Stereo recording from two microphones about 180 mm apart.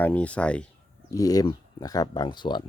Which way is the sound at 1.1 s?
20° left (ahead or behind).